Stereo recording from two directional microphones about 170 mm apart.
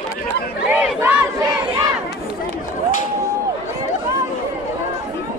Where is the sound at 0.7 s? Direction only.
5° right (ahead or behind).